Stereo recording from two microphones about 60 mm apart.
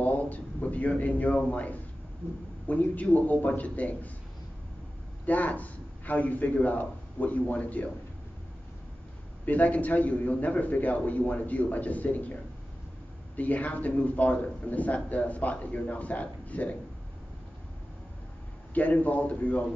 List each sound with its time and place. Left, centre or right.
0.0 s a man's voice: left
5.2 s a man's voice: left
9.5 s a man's voice: left
13.4 s a man's voice: left
18.7 s a man's voice: left